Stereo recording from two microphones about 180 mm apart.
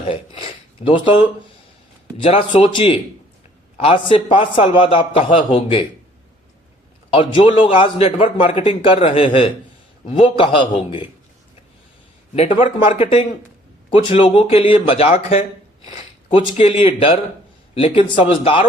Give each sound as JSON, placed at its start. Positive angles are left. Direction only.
{"t": 0.0, "sound": "a sound", "side_deg": 30}
{"t": 2.2, "sound": "a man's voice", "side_deg": 30}
{"t": 7.1, "sound": "a man's voice", "side_deg": 30}
{"t": 12.3, "sound": "a man's voice", "side_deg": 35}
{"t": 16.6, "sound": "a man's voice", "side_deg": 30}